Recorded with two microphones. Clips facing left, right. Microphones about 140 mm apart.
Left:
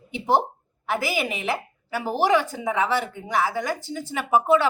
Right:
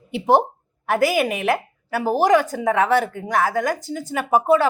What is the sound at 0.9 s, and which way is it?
A woman's voice, 50° right (ahead or behind).